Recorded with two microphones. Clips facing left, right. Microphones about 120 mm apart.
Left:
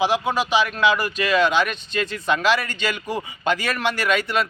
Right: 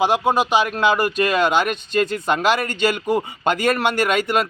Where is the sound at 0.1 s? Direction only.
45° right (ahead or behind).